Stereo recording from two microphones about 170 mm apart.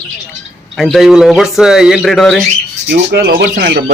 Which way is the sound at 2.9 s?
70° right (ahead or behind).